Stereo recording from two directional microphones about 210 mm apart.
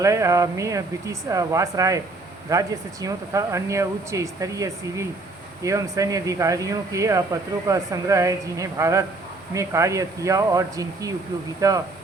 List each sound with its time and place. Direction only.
0.0 s speech: 15° right (ahead or behind)